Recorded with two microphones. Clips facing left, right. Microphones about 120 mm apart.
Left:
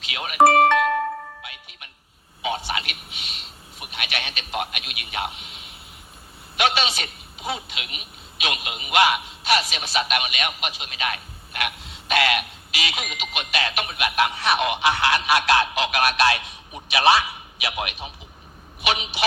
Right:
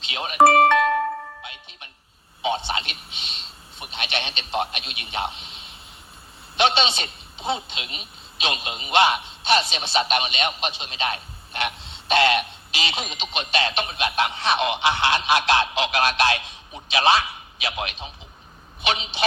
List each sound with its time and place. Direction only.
0.0 s speech: 25° right (ahead or behind)
1.4 s music: 25° right (ahead or behind)
2.4 s a man's voice: 25° right (ahead or behind)
17.7 s a man's voice: 20° left (ahead or behind)
18.8 s a woman's voice: 25° right (ahead or behind)